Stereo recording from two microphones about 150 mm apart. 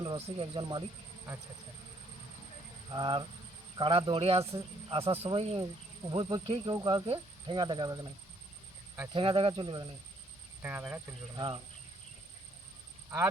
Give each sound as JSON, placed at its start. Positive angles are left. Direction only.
{"t": 0.0, "sound": "speech", "side_deg": -30}
{"t": 2.9, "sound": "speech", "side_deg": -35}
{"t": 9.1, "sound": "speech", "side_deg": -35}
{"t": 10.6, "sound": "speech", "side_deg": -10}
{"t": 11.3, "sound": "speech", "side_deg": -35}